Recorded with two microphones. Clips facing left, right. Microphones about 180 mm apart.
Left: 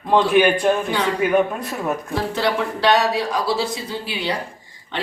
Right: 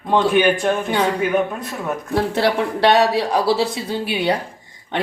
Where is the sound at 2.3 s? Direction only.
60° right (ahead or behind).